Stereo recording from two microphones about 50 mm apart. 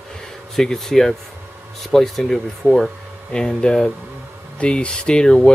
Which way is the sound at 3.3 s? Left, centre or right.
Centre.